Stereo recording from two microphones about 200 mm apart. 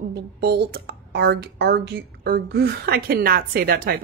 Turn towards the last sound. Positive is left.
turn(degrees=-50)  # may be behind; listen again after turning